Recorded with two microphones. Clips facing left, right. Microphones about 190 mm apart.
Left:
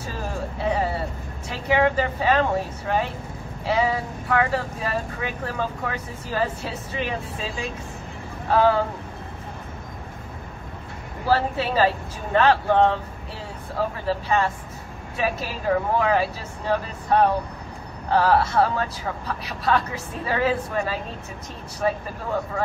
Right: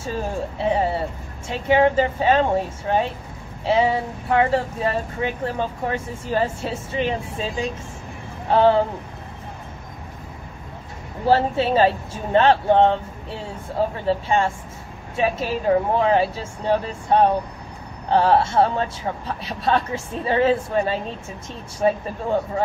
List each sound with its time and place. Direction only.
0.6 s vehicle: 25° right (ahead or behind)
1.5 s speech: 25° right (ahead or behind)
8.5 s speech: 25° right (ahead or behind)
11.2 s speech: 25° right (ahead or behind)